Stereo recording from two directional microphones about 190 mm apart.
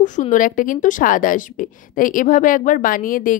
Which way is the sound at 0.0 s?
40° left (ahead or behind).